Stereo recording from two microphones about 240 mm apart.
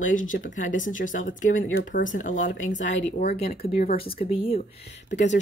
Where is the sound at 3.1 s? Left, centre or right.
Left.